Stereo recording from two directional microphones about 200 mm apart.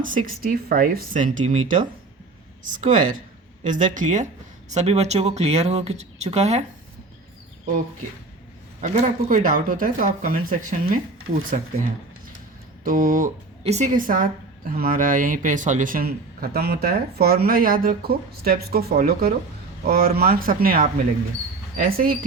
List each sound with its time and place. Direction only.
0.3 s speech: 45° right (ahead or behind)
8.8 s speech: 35° right (ahead or behind)
12.8 s a man's voice: 40° right (ahead or behind)